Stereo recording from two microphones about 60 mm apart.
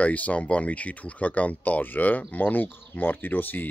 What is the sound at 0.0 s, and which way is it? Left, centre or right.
Speech, left.